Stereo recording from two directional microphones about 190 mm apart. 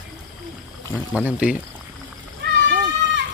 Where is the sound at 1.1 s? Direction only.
5° right (ahead or behind).